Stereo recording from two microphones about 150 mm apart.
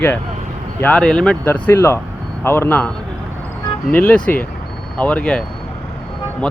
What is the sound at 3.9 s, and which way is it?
Speech, 10° left (ahead or behind).